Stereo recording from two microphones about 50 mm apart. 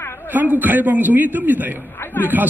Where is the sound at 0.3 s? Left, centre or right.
Right.